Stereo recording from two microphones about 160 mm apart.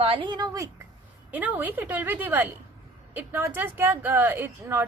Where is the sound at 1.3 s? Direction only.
10° right (ahead or behind).